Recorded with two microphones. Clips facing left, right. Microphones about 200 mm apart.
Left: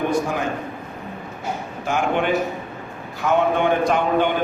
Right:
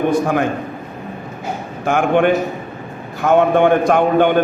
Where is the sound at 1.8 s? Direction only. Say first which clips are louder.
Right 7 dB; 55° right (ahead or behind).